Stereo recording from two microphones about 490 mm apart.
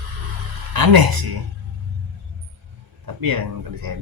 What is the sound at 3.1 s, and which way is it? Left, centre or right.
Speech, right.